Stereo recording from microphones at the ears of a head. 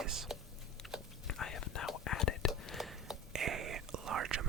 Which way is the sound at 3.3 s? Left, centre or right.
Right.